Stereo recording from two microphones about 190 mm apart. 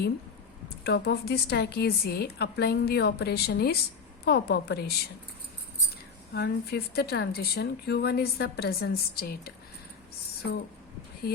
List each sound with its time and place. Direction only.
0.9 s a woman's voice: 60° left (ahead or behind)
6.3 s a woman's voice: 55° left (ahead or behind)